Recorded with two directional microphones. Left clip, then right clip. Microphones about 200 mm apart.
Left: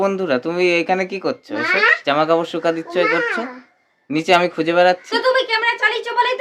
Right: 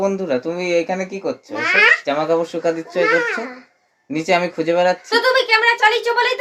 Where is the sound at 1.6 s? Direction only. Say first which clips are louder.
Right 2 dB; 10° left (ahead or behind).